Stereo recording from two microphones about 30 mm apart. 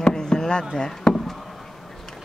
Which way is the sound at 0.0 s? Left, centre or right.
Left.